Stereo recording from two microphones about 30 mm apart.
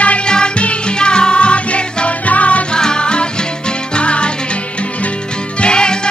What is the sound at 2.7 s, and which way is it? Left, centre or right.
Music, left.